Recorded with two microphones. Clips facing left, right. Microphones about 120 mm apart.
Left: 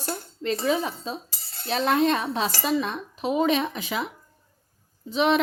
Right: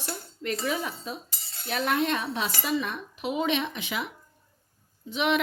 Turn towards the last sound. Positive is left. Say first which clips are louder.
# left 4 dB
turn(degrees=35)  # may be behind; listen again after turning